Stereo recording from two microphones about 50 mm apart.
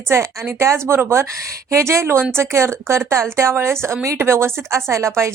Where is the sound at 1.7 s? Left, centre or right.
Right.